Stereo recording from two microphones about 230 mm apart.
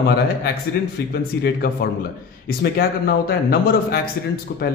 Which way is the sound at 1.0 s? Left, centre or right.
Left.